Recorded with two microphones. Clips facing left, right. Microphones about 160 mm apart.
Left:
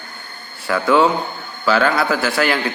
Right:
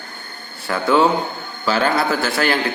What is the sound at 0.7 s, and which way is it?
A man's voice, 25° right (ahead or behind).